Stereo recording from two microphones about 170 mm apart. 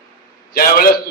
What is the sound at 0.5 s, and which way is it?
Speech, 60° left (ahead or behind).